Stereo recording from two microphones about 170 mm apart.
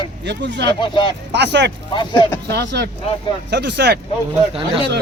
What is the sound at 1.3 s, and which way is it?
Speech, 85° right.